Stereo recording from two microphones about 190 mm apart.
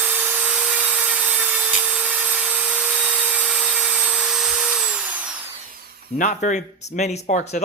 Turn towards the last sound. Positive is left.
turn(degrees=40)  # may be behind; listen again after turning